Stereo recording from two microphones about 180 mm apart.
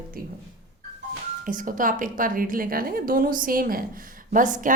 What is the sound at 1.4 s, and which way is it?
A woman's voice, 50° right (ahead or behind).